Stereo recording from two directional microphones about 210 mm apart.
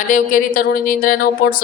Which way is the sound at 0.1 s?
40° left (ahead or behind).